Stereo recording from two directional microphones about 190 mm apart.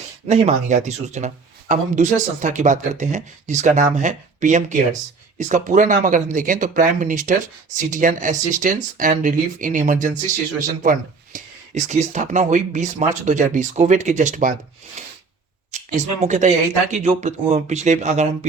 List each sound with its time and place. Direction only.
0.3 s speech: 35° right (ahead or behind)
15.7 s speech: 40° right (ahead or behind)